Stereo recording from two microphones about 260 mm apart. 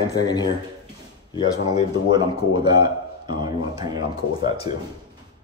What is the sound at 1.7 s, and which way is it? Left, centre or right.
A man's voice, centre.